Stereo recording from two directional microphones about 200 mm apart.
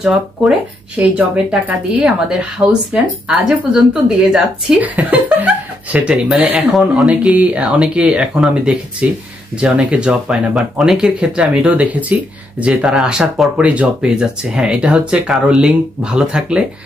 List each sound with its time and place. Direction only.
0.0 s speech: 5° right (ahead or behind)